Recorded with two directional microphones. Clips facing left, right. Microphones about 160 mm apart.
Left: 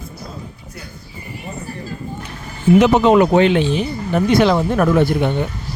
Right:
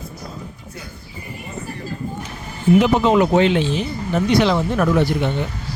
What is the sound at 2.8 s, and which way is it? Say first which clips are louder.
Speech: left 4 dB; 65° left (ahead or behind).